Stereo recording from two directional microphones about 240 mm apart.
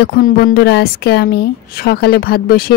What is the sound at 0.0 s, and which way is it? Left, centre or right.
A woman's voice, left.